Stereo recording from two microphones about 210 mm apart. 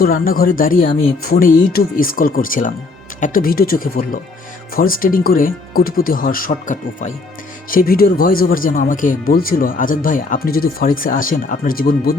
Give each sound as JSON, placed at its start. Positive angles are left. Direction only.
{"t": 0.0, "sound": "speech", "side_deg": 45}